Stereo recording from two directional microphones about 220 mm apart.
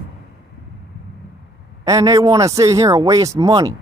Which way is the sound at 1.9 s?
15° right (ahead or behind).